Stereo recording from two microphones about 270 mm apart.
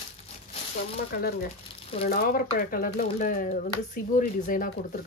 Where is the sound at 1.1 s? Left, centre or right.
Left.